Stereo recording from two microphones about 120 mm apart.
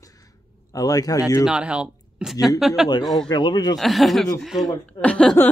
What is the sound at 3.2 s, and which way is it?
Speech, 35° left (ahead or behind).